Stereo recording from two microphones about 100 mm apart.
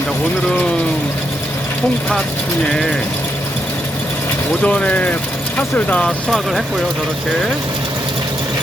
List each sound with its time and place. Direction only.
4.6 s speech: 10° left (ahead or behind)
6.1 s speech: 5° left (ahead or behind)